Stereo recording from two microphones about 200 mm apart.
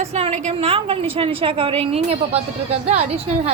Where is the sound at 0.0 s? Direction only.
35° right (ahead or behind).